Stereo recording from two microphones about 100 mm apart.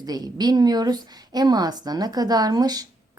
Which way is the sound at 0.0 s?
40° right (ahead or behind).